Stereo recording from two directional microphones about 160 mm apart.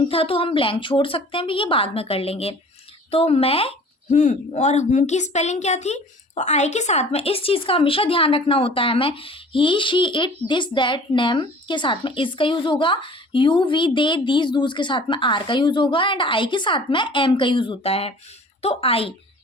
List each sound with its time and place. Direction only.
0.1 s a woman's voice: 35° left (ahead or behind)
4.1 s a woman's voice: 50° left (ahead or behind)